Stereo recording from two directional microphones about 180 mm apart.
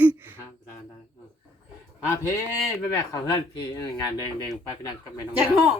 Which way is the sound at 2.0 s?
15° left (ahead or behind).